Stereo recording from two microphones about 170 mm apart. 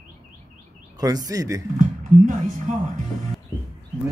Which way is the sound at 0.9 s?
20° right (ahead or behind).